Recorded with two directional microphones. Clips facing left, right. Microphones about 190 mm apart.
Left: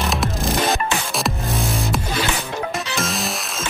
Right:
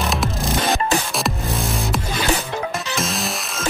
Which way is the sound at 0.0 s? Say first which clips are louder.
Even; centre (ahead or behind).